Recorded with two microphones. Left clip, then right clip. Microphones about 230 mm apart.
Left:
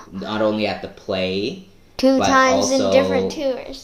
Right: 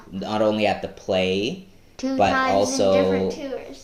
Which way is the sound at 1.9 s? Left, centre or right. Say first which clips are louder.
Left 11 dB; left.